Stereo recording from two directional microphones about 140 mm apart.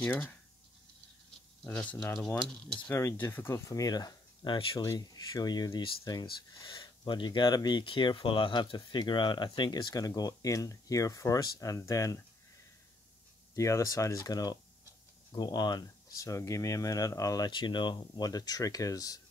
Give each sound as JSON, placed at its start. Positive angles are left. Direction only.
{"t": 0.0, "sound": "speech", "side_deg": 10}
{"t": 1.6, "sound": "speech", "side_deg": 10}
{"t": 2.9, "sound": "speech", "side_deg": 20}
{"t": 13.6, "sound": "speech", "side_deg": 20}